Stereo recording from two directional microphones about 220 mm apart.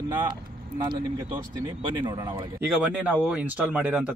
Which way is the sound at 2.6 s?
5° right (ahead or behind).